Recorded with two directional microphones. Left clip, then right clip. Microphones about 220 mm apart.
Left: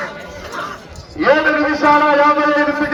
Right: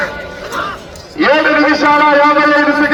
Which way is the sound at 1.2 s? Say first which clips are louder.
Right 3 dB; 25° right (ahead or behind).